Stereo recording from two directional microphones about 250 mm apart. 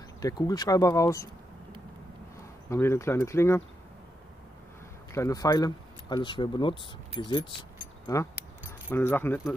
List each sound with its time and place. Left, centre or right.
0.2 s speech: centre
2.7 s speech: centre
5.1 s speech: centre
8.9 s speech: centre